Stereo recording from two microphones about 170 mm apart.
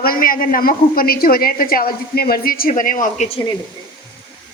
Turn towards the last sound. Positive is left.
turn(degrees=50)  # may be behind; listen again after turning